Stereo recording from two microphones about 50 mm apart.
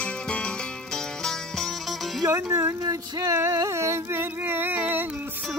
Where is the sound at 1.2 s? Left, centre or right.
Centre.